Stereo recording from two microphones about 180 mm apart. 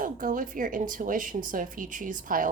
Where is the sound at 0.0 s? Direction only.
50° right (ahead or behind).